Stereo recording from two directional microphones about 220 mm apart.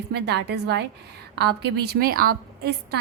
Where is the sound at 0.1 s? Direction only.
50° right (ahead or behind).